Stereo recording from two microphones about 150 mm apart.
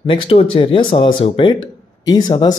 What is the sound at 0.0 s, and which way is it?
Speech, 35° left (ahead or behind).